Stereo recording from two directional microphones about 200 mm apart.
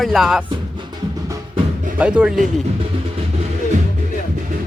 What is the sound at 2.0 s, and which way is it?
Speech, 5° right (ahead or behind).